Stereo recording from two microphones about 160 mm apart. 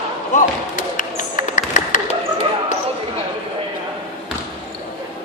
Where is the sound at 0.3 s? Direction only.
55° left (ahead or behind).